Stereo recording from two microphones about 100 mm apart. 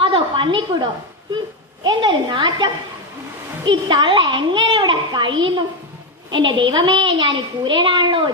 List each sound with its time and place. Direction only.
0.0 s a sound: 55° right (ahead or behind)
1.8 s a child's voice: 55° right (ahead or behind)
3.7 s a child's voice: 50° right (ahead or behind)